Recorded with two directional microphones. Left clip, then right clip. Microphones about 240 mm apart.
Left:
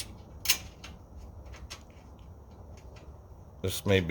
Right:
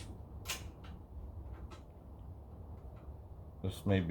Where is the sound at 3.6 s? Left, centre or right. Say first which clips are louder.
Left 9 dB; left.